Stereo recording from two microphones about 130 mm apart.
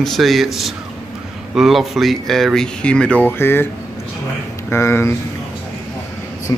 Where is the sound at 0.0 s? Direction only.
Centre (ahead or behind); by 3.6 s 15° left (ahead or behind).